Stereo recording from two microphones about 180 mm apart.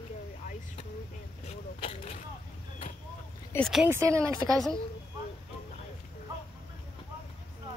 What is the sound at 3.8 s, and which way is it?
Speech, 15° right (ahead or behind).